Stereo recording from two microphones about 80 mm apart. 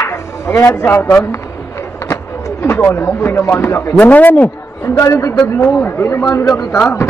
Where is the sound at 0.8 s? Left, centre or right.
Left.